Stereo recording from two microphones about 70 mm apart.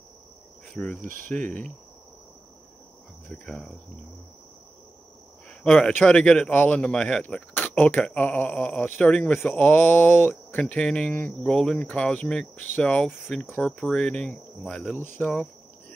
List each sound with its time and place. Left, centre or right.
0.7 s speech: centre
3.3 s speech: centre
5.5 s speech: centre
6.5 s speech: left
6.8 s speech: centre
15.0 s speech: left